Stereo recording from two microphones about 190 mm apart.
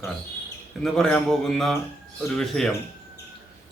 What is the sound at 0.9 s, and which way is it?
Speech, 5° left (ahead or behind).